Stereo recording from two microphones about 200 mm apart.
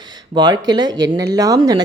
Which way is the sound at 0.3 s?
20° right (ahead or behind).